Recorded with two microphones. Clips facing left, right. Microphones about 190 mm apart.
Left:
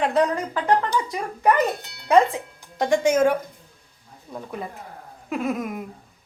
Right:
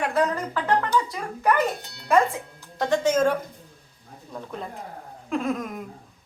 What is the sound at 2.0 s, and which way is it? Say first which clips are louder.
Speech: left 3 dB; 20° left (ahead or behind).